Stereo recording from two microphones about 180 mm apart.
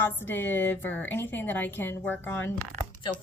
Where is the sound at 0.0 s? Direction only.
10° left (ahead or behind).